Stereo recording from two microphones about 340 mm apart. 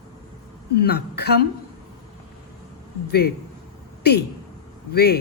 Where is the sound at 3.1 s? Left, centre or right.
Left.